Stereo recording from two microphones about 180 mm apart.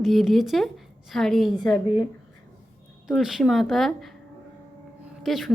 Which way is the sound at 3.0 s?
Centre (ahead or behind).